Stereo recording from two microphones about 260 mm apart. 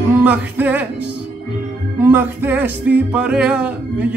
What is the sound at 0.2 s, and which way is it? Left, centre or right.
Music, centre.